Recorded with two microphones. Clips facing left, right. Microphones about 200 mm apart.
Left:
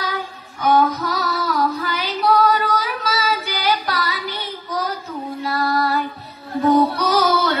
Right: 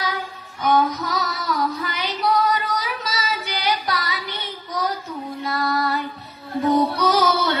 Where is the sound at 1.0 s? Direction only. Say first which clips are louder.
Left 3 dB; 20° right (ahead or behind).